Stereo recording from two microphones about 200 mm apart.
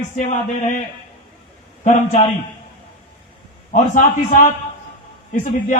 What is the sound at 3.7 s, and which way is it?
Speech, 35° left (ahead or behind).